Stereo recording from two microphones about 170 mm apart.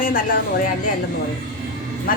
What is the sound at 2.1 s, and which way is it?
Vehicle, 55° left (ahead or behind).